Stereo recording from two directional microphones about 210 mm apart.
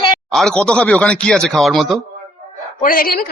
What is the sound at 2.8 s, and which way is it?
Speech, 40° left (ahead or behind).